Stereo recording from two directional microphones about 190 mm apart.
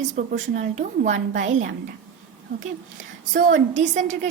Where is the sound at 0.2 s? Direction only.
40° right (ahead or behind).